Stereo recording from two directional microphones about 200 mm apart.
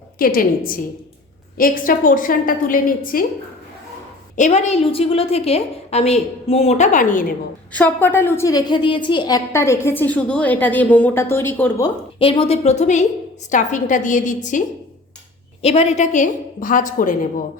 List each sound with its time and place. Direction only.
0.2 s a woman's voice: 45° left (ahead or behind)
4.4 s a woman's voice: 35° left (ahead or behind)
7.7 s a woman's voice: 10° left (ahead or behind)
12.2 s a woman's voice: 25° left (ahead or behind)
15.6 s a woman's voice: 35° left (ahead or behind)